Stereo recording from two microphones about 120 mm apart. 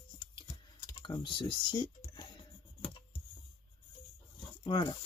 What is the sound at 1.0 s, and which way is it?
Speech, 40° left (ahead or behind).